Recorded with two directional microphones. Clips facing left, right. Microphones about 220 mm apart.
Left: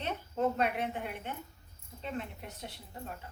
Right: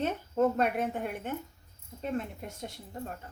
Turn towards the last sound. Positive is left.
turn(degrees=-45)  # may be behind; listen again after turning